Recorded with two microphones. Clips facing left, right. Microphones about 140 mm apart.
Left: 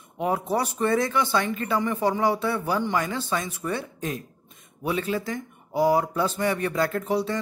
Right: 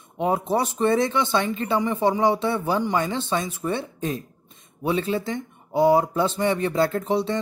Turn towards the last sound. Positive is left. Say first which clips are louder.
# right 2 dB
turn(degrees=-25)  # may be behind; listen again after turning